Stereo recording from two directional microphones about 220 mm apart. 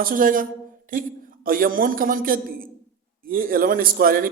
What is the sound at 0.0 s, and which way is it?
A man's voice, 40° right (ahead or behind).